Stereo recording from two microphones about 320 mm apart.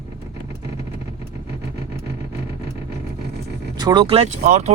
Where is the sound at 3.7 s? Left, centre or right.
Centre.